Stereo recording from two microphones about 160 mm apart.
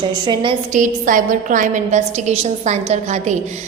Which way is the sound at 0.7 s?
55° right (ahead or behind).